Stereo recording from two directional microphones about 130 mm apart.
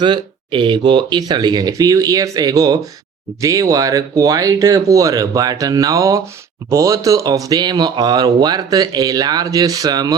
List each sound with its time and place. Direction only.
0.0 s speech: 35° right (ahead or behind)